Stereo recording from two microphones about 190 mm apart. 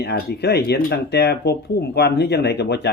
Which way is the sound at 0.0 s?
60° left (ahead or behind).